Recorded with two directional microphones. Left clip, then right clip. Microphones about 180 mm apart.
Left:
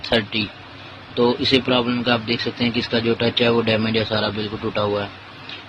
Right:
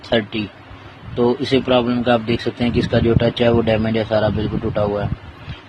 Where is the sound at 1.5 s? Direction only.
35° right (ahead or behind).